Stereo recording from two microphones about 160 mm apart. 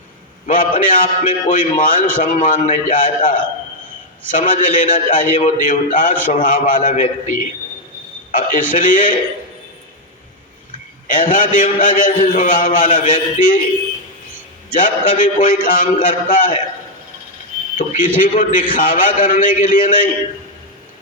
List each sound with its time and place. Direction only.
0.4 s a man's voice: 55° left (ahead or behind)
8.3 s a man's voice: 55° left (ahead or behind)
11.1 s a man's voice: 55° left (ahead or behind)
14.7 s a man's voice: 55° left (ahead or behind)
17.7 s a man's voice: 55° left (ahead or behind)